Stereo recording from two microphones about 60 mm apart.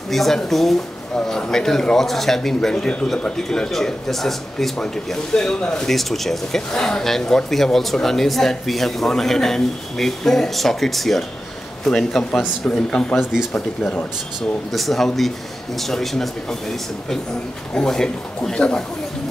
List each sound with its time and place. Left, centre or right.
0.1 s speech: centre
1.1 s speech: centre
14.7 s speech: centre